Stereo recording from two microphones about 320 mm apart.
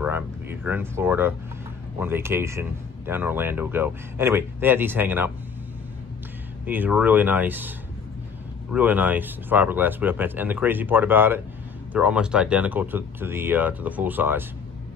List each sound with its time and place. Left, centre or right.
0.0 s speech: centre
6.6 s speech: centre
8.7 s speech: centre